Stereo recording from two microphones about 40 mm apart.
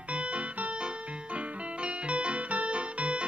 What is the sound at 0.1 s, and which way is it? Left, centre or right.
Music, right.